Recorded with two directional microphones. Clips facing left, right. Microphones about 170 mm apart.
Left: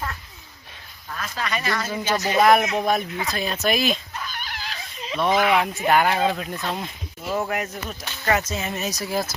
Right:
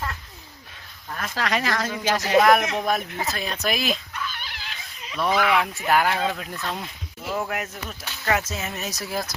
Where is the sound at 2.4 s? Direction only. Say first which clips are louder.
Left 3 dB; 5° left (ahead or behind).